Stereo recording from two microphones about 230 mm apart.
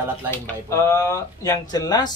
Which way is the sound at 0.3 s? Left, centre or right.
Centre.